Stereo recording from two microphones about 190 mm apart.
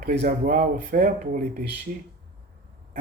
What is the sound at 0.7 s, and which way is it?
Speech, 50° right (ahead or behind).